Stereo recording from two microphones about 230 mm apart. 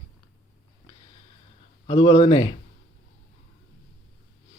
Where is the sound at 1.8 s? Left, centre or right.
Left.